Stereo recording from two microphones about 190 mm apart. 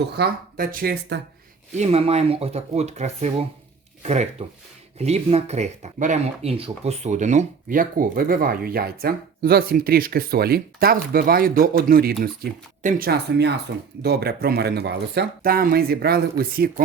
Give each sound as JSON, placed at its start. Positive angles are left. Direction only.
{"t": 0.0, "sound": "speech", "side_deg": -55}
{"t": 1.7, "sound": "speech", "side_deg": -35}